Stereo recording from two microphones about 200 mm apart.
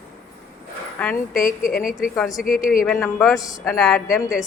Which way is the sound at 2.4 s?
45° left (ahead or behind).